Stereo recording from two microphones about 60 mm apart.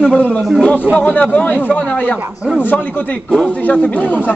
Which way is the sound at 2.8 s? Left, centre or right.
Left.